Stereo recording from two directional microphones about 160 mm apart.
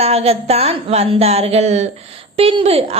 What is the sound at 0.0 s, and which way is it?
A woman's voice, 40° right (ahead or behind).